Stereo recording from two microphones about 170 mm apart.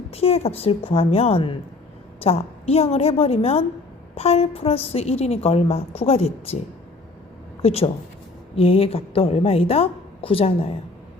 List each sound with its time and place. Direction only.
0.1 s a woman's voice: 35° left (ahead or behind)
7.6 s a woman's voice: 35° left (ahead or behind)